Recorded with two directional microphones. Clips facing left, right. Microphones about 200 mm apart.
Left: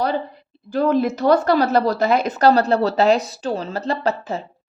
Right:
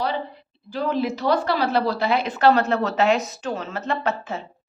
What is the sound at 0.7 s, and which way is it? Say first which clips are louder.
A woman's voice: left 6 dB; 45° left (ahead or behind).